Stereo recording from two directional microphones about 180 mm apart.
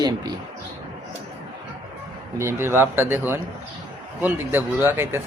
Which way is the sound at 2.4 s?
15° right (ahead or behind).